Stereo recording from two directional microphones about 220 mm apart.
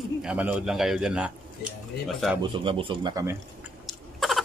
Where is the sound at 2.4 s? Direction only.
20° right (ahead or behind).